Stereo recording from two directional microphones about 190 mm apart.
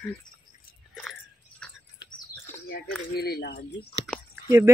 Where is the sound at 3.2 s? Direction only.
55° left (ahead or behind).